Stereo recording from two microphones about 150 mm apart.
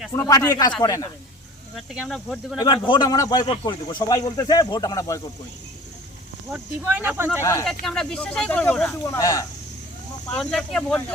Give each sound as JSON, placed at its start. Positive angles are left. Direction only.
{"t": 0.2, "sound": "speech", "side_deg": 20}
{"t": 1.7, "sound": "speech", "side_deg": 0}
{"t": 2.6, "sound": "speech", "side_deg": 30}
{"t": 6.5, "sound": "speech", "side_deg": -10}
{"t": 7.6, "sound": "speech", "side_deg": 5}
{"t": 8.9, "sound": "speech", "side_deg": 20}
{"t": 10.3, "sound": "speech", "side_deg": 5}